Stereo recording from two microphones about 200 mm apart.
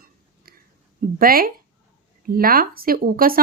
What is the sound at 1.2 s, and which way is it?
Speech, 45° right (ahead or behind).